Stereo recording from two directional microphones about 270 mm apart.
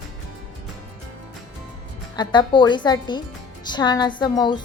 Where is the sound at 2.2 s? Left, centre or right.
Centre.